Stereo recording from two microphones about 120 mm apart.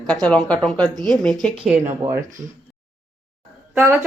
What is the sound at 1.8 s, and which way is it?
Speech, 25° right (ahead or behind).